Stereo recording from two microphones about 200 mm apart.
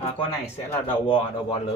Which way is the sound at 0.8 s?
25° left (ahead or behind).